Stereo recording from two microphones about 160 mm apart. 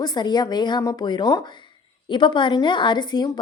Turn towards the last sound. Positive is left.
turn(degrees=25)  # may be behind; listen again after turning